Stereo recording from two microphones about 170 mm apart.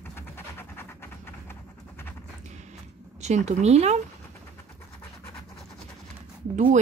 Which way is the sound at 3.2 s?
40° right (ahead or behind).